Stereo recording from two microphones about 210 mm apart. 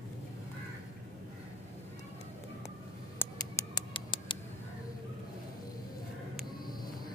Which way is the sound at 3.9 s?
25° left (ahead or behind).